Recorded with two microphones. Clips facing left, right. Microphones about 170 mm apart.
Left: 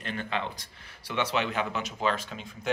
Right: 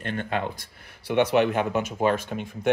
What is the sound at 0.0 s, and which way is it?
Speech, 50° right (ahead or behind).